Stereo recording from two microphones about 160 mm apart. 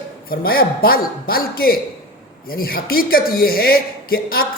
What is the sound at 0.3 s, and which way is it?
A man's voice, 70° left (ahead or behind).